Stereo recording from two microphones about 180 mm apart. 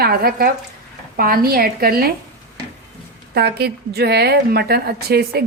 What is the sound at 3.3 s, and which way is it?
Speech, 65° right (ahead or behind).